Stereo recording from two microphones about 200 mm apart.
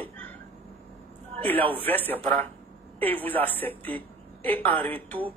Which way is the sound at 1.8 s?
10° left (ahead or behind).